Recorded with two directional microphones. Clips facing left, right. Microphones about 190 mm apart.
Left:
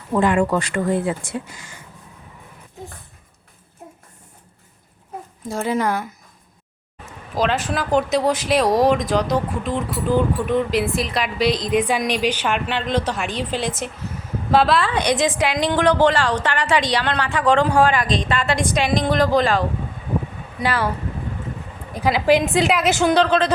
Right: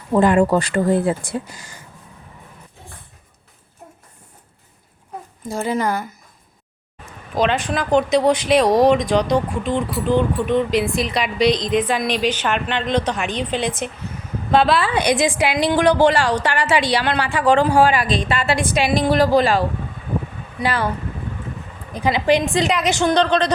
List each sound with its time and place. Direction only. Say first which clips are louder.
0.1 s speech: right 3 dB; 35° right (ahead or behind)
5.4 s speech: even; centre (ahead or behind)
7.3 s a woman's voice: right 2 dB; 5° left (ahead or behind)
21.9 s speech: even; 5° left (ahead or behind)